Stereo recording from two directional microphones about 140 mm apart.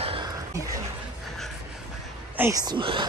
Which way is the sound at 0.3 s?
25° right (ahead or behind).